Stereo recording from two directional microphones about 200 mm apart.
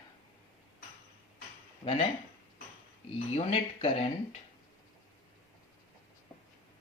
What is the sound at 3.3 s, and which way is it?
Speech, 30° left (ahead or behind).